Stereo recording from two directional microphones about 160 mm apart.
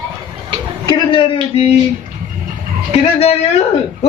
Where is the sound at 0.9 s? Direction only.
30° left (ahead or behind).